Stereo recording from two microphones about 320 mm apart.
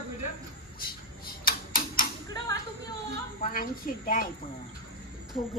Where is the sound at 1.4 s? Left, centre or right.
Left.